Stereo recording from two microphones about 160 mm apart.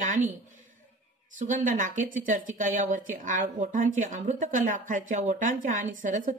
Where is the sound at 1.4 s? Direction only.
50° right (ahead or behind).